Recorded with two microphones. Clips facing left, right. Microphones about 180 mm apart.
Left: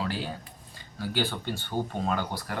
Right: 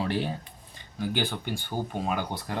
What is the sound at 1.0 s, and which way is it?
Speech, 15° right (ahead or behind).